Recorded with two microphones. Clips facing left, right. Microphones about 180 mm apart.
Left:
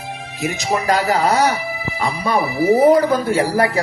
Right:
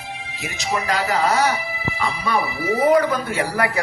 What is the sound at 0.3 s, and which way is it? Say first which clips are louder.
Speech: left 5 dB; 45° left (ahead or behind).